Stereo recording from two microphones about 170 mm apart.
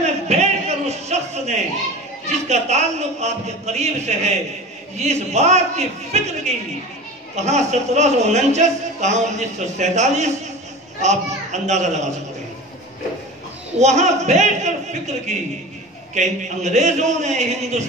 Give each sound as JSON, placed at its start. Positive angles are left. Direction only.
{"t": 0.0, "sound": "a sound", "side_deg": -40}
{"t": 2.4, "sound": "a man's voice", "side_deg": -40}
{"t": 13.7, "sound": "a man's voice", "side_deg": -45}